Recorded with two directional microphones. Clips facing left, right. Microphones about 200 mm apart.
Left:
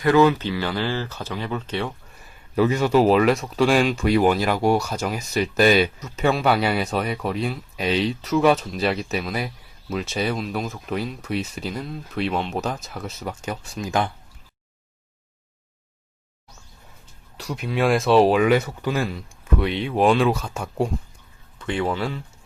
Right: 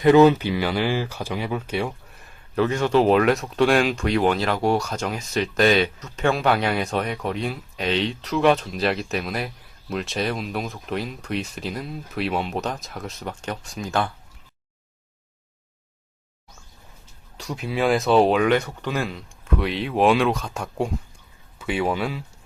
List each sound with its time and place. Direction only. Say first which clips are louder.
0.0 s speech: right 3 dB; 20° right (ahead or behind)
2.2 s speech: left 2 dB; 5° left (ahead or behind)
17.3 s speech: left 1 dB; centre (ahead or behind)